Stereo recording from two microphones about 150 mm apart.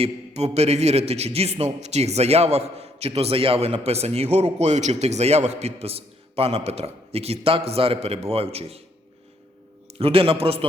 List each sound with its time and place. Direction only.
0.0 s a man's voice: 45° right (ahead or behind)
10.0 s a man's voice: 40° right (ahead or behind)